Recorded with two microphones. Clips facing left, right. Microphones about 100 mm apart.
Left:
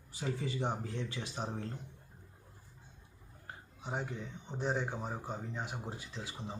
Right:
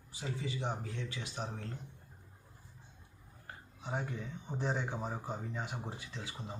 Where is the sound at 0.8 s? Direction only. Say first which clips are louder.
Left 2 dB; 35° left (ahead or behind).